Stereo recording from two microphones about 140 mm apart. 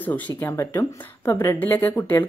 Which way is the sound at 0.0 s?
15° left (ahead or behind).